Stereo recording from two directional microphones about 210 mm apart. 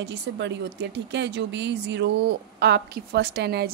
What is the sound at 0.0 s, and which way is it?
Speech, 55° right (ahead or behind).